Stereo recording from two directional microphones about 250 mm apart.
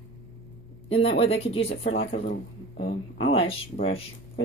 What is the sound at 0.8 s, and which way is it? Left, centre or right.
Speech, left.